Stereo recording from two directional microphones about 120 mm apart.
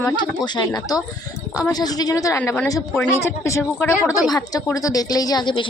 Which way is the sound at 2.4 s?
15° left (ahead or behind).